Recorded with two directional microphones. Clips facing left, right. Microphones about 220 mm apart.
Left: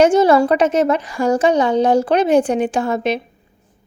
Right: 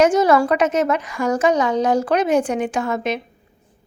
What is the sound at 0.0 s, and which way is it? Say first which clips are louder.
A woman's voice: left 3 dB; 30° left (ahead or behind).